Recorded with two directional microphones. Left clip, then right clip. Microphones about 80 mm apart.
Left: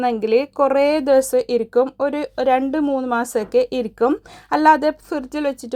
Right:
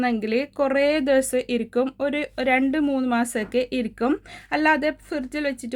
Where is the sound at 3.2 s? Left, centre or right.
Left.